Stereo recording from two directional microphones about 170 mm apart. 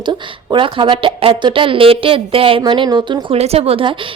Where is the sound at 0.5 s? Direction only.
30° right (ahead or behind).